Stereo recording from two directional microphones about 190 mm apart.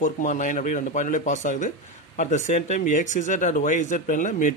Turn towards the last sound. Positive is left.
turn(degrees=45)  # may be behind; listen again after turning